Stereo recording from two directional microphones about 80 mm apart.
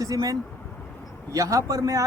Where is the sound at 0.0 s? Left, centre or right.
Right.